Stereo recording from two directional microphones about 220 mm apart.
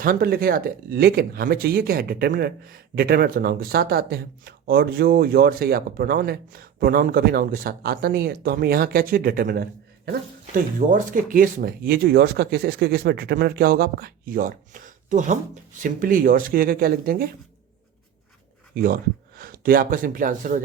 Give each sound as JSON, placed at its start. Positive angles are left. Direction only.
{"t": 0.0, "sound": "speech", "side_deg": -40}
{"t": 19.4, "sound": "speech", "side_deg": -40}